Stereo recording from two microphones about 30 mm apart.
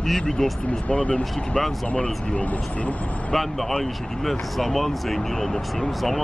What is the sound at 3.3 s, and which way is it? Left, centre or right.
Speech, centre.